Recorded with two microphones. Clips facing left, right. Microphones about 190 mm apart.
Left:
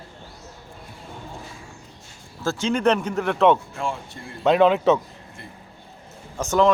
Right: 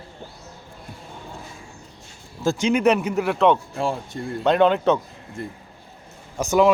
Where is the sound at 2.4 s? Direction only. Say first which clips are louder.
Right 2 dB; 15° right (ahead or behind).